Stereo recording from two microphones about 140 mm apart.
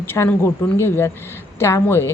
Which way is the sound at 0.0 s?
15° left (ahead or behind).